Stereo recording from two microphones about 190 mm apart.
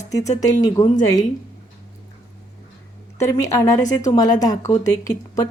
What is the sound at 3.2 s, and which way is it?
A woman's voice, 15° left (ahead or behind).